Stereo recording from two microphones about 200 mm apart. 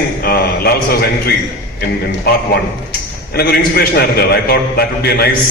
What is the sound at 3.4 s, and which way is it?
A man's voice, 50° left (ahead or behind).